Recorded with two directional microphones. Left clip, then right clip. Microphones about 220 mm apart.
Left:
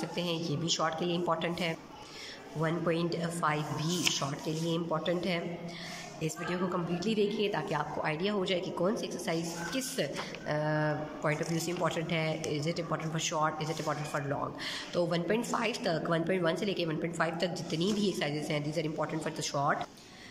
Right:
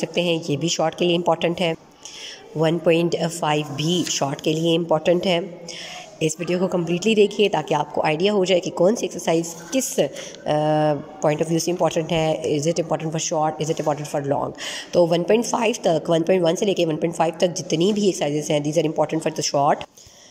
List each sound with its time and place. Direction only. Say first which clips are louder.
0.0 s a woman's voice: right 13 dB; 35° right (ahead or behind)